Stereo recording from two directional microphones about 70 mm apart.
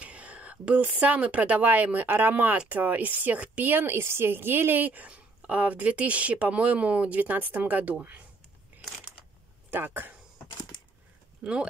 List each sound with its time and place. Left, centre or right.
0.0 s speech: centre
9.7 s speech: right
11.4 s speech: centre